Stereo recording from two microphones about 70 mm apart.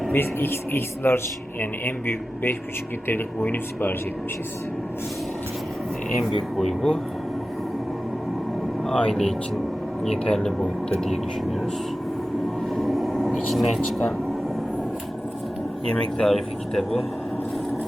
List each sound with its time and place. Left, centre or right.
0.1 s speech: left
6.6 s speech: centre
8.8 s speech: centre
12.7 s a sound: centre
13.5 s speech: centre
15.9 s speech: centre